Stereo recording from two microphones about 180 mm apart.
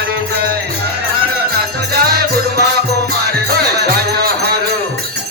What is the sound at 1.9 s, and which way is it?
Music, 60° right (ahead or behind).